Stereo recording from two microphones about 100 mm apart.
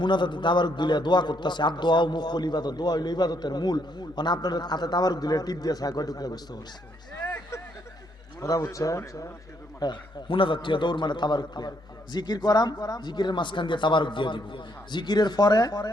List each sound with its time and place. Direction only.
0.0 s a man's voice: 50° left (ahead or behind)
8.4 s speech: 35° left (ahead or behind)
9.8 s a man's voice: 55° left (ahead or behind)